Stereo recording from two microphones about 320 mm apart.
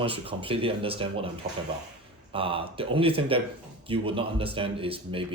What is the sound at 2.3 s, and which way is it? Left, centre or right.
A man's voice, centre.